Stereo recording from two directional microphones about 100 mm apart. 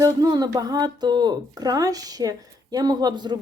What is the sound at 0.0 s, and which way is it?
A woman's voice, 40° right (ahead or behind).